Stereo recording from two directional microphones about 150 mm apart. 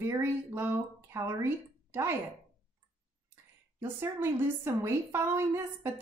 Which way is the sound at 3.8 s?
15° right (ahead or behind).